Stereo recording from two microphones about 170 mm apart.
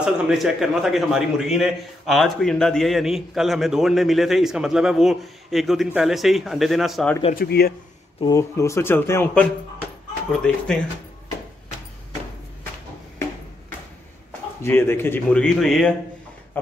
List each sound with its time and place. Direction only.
0.0 s a man's voice: centre (ahead or behind)
7.3 s speech: 65° left (ahead or behind)
8.2 s speech: 20° left (ahead or behind)
14.6 s speech: 15° left (ahead or behind)